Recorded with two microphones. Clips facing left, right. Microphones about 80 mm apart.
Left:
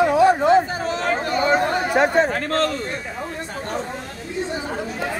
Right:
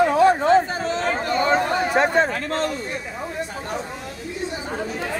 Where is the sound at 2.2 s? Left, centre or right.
Left.